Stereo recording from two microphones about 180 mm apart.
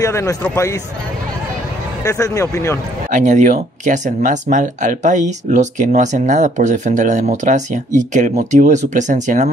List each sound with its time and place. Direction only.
0.0 s speech: 15° left (ahead or behind)
2.0 s speech: 15° left (ahead or behind)
3.1 s speech: 45° right (ahead or behind)